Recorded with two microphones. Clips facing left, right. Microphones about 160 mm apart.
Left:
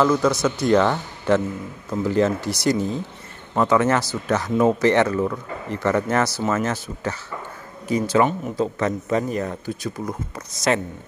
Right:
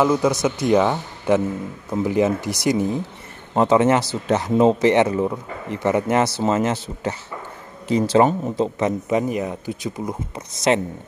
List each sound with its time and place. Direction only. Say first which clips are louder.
0.0 s a man's voice: right 1 dB; 15° right (ahead or behind)
7.9 s speech: right 3 dB; 30° right (ahead or behind)